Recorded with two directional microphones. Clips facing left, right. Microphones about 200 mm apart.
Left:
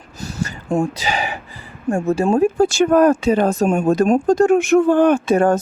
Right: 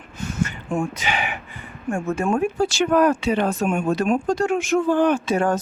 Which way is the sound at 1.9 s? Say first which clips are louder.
Left 5 dB; 40° left (ahead or behind).